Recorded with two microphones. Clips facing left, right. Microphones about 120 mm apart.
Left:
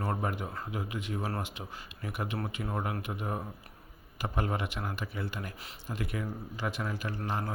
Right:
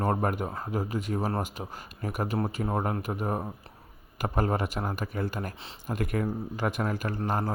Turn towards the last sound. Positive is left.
turn(degrees=-45)  # may be behind; listen again after turning